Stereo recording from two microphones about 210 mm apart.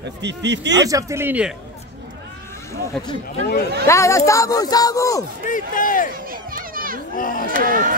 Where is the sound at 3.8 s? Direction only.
15° left (ahead or behind).